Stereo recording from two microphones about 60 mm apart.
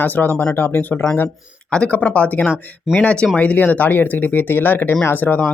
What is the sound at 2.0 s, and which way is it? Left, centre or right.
Speech, left.